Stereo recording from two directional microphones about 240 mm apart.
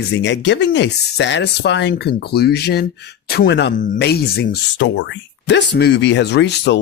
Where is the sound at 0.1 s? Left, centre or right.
Left.